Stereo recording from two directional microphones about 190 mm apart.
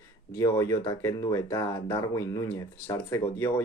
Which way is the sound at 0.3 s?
15° left (ahead or behind).